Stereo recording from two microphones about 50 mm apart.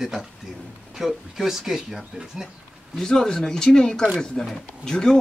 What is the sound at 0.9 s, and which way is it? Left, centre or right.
Speech, centre.